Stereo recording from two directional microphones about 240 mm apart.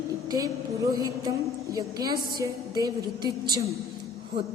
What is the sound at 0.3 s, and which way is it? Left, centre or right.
A woman's voice, centre.